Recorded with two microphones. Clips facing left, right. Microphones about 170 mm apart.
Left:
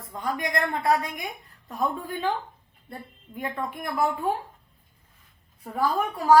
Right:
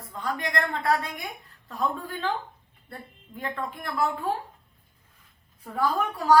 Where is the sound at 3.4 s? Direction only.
15° left (ahead or behind).